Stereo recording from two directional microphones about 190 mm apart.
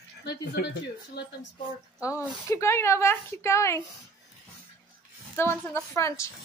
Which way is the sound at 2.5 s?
15° left (ahead or behind).